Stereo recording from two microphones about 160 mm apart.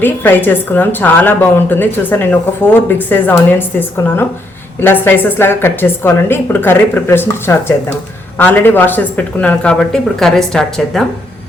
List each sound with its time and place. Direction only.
0.0 s a woman's voice: 10° left (ahead or behind)